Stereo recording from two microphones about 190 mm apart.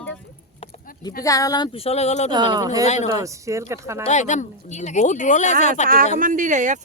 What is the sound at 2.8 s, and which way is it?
Speech, 35° left (ahead or behind).